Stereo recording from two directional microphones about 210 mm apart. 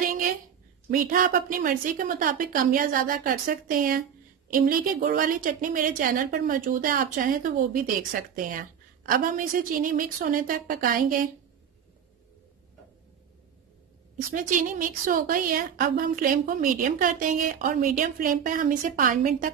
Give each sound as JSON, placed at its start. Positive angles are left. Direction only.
{"t": 0.0, "sound": "a sound", "side_deg": -45}
{"t": 0.8, "sound": "a woman's voice", "side_deg": -40}
{"t": 14.3, "sound": "a woman's voice", "side_deg": -40}